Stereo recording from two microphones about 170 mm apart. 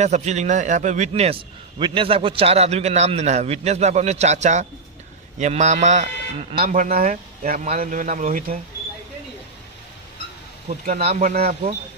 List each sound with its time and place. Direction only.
0.0 s a man's voice: 40° right (ahead or behind)
6.5 s speech: 55° right (ahead or behind)
10.7 s speech: 40° right (ahead or behind); by 11.5 s 55° right (ahead or behind)